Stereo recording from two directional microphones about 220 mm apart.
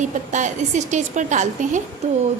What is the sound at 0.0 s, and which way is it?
A woman's voice, 35° right (ahead or behind).